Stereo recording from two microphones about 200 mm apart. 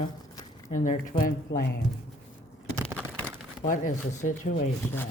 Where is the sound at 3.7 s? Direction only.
40° left (ahead or behind).